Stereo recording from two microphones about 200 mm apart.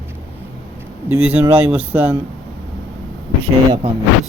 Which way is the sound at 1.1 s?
10° right (ahead or behind).